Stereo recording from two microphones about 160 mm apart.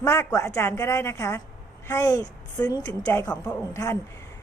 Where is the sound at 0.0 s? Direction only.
20° left (ahead or behind).